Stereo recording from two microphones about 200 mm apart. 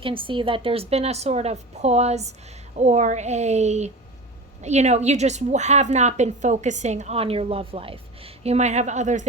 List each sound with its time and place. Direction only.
0.0 s a woman's voice: 25° right (ahead or behind)